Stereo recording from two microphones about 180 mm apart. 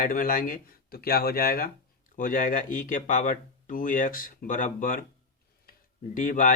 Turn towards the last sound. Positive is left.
turn(degrees=50)  # may be behind; listen again after turning